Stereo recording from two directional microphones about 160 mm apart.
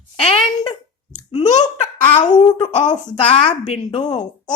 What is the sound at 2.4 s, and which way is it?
Speech, 25° left (ahead or behind).